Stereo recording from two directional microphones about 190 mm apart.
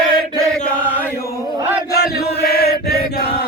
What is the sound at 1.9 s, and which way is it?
Chant, 55° left (ahead or behind).